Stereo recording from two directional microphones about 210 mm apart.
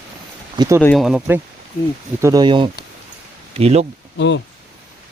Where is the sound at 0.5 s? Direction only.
20° right (ahead or behind).